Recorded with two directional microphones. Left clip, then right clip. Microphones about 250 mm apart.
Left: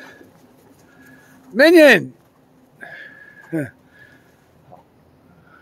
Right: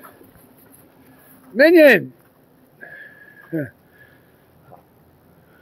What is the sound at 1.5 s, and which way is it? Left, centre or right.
Speech, left.